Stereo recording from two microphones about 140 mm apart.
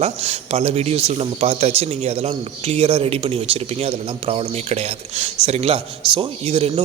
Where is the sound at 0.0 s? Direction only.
45° right (ahead or behind).